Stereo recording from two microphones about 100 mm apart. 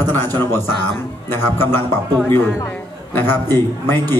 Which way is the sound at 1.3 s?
20° left (ahead or behind).